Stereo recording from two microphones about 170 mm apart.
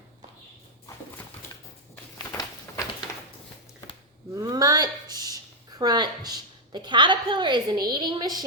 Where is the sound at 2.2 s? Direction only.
20° left (ahead or behind).